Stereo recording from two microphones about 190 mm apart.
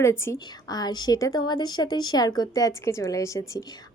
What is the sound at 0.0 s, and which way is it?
A woman's voice, 15° left (ahead or behind).